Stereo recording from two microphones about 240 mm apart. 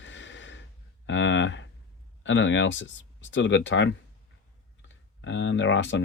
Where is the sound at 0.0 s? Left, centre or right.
Left.